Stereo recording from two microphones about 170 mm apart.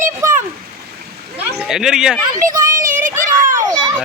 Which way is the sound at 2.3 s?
20° right (ahead or behind).